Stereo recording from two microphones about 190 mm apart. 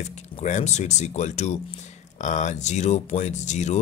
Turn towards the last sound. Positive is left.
turn(degrees=40)  # may be behind; listen again after turning